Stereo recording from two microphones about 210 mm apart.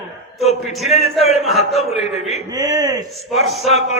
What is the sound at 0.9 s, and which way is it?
Speech, 30° left (ahead or behind).